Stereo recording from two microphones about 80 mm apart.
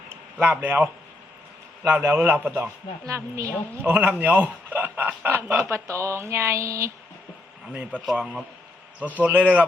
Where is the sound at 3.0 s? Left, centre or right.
Right.